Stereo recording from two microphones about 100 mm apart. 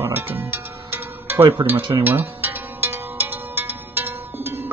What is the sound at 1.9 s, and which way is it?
Zither, 20° right (ahead or behind).